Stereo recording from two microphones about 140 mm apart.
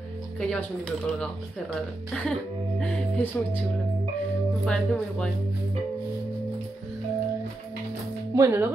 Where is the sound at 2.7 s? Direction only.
10° left (ahead or behind).